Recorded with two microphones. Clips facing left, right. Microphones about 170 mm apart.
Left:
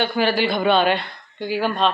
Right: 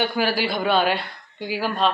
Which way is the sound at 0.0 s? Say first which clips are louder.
Left 3 dB; 5° right (ahead or behind).